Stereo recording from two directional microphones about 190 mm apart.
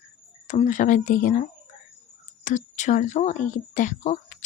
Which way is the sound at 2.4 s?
40° left (ahead or behind).